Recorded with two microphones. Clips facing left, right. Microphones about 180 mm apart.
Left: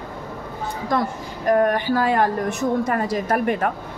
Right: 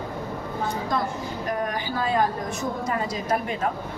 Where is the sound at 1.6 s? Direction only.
65° left (ahead or behind).